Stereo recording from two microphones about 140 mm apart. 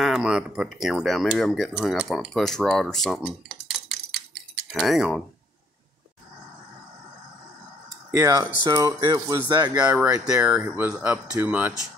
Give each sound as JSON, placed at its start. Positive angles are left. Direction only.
{"t": 0.0, "sound": "speech", "side_deg": -5}
{"t": 8.1, "sound": "speech", "side_deg": -25}
{"t": 9.8, "sound": "speech", "side_deg": -10}
{"t": 10.0, "sound": "speech", "side_deg": -20}
{"t": 10.4, "sound": "speech", "side_deg": -10}